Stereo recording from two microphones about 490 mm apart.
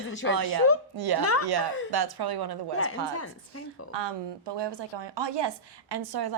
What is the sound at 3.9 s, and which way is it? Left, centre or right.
A woman's voice, right.